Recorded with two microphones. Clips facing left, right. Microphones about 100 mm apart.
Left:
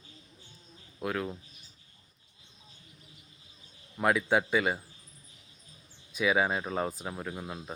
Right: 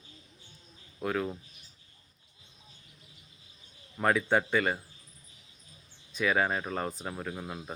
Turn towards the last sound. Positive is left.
turn(degrees=0)  # may be behind; listen again after turning